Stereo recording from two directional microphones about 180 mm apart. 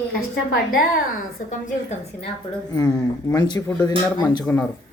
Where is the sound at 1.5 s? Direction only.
45° left (ahead or behind).